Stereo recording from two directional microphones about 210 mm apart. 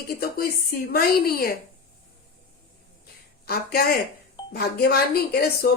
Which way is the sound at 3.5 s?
50° left (ahead or behind).